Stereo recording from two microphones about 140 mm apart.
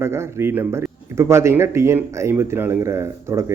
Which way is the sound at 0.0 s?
20° right (ahead or behind).